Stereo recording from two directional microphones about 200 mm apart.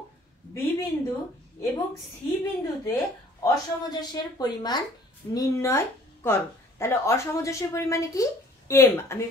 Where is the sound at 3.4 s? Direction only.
20° left (ahead or behind).